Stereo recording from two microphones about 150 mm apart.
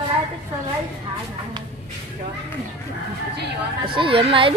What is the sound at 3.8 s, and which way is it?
Speech, 35° right (ahead or behind).